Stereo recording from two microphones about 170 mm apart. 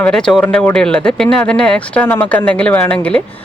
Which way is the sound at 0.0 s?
5° left (ahead or behind).